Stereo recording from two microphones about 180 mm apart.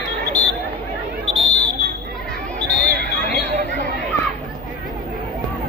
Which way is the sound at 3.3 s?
70° left (ahead or behind).